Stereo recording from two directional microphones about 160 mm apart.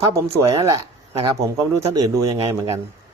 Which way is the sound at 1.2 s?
20° right (ahead or behind).